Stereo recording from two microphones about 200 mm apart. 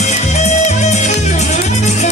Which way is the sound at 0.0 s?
35° left (ahead or behind).